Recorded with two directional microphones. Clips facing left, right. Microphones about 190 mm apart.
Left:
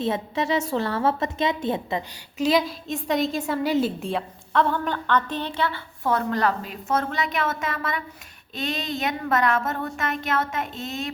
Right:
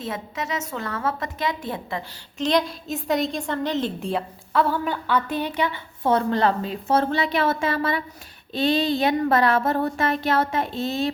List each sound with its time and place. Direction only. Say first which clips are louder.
0.0 s a woman's voice: left 5 dB; 30° left (ahead or behind)
2.4 s a woman's voice: left 1 dB; 5° left (ahead or behind); by 11.1 s 30° right (ahead or behind)